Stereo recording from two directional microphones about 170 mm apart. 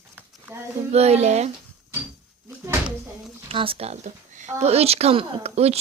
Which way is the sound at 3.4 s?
30° right (ahead or behind).